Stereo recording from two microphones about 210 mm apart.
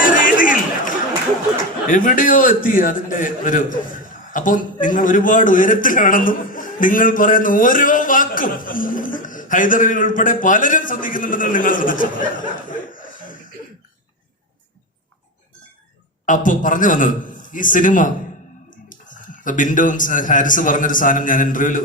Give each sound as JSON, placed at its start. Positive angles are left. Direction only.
{"t": 0.0, "sound": "chatter", "side_deg": 40}
{"t": 1.9, "sound": "a man's voice", "side_deg": 40}
{"t": 16.2, "sound": "a man's voice", "side_deg": 40}